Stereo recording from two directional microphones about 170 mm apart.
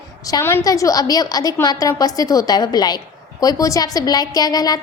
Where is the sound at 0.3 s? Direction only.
15° left (ahead or behind).